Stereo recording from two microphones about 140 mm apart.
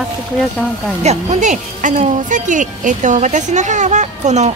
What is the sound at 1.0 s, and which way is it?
Speech, 55° right (ahead or behind).